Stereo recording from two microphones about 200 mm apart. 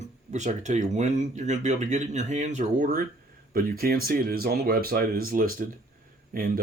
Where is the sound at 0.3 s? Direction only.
35° right (ahead or behind).